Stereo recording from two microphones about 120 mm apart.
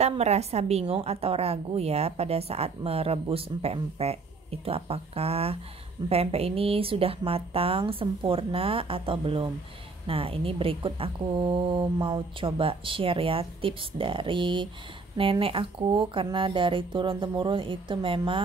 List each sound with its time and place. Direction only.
0.2 s a woman's voice: 60° right (ahead or behind); by 18.4 s 45° right (ahead or behind)